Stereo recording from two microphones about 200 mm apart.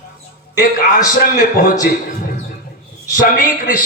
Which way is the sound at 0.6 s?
45° left (ahead or behind).